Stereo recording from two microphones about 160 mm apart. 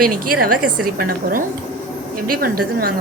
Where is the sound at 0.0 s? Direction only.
65° right (ahead or behind).